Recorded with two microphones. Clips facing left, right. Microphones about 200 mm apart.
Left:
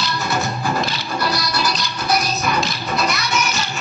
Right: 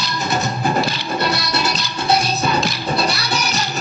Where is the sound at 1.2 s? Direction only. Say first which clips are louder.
Even; 25° right (ahead or behind).